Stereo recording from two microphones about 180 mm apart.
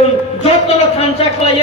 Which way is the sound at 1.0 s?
35° left (ahead or behind).